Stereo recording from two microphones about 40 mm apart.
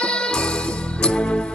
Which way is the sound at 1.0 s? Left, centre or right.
Left.